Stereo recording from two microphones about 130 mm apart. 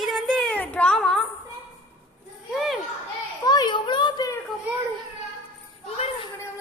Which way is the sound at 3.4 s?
35° left (ahead or behind).